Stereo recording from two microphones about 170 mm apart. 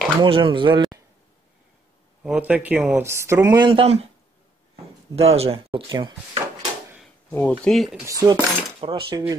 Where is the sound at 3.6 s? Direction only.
30° right (ahead or behind).